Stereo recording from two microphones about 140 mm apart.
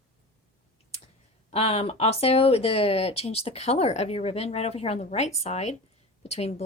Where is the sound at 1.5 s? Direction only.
45° left (ahead or behind).